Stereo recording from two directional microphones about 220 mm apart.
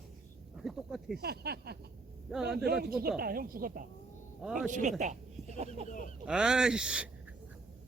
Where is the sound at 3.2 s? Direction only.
40° right (ahead or behind).